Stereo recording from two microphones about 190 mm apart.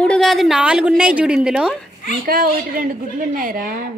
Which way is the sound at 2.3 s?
50° right (ahead or behind).